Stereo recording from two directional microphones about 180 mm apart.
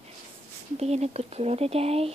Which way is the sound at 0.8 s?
35° right (ahead or behind).